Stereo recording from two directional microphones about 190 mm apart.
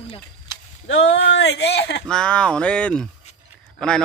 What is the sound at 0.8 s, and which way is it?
Speech, 70° left (ahead or behind).